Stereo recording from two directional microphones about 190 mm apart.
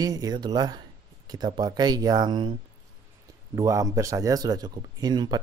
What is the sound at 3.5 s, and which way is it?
Speech, 15° right (ahead or behind).